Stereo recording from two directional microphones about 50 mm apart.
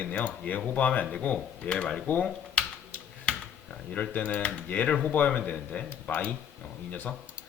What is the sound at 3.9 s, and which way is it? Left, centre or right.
Speech, left.